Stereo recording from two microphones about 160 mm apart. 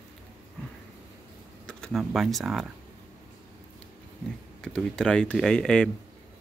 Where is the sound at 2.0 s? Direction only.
Centre (ahead or behind).